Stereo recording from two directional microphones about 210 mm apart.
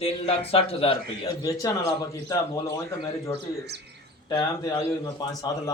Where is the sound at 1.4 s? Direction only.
15° left (ahead or behind).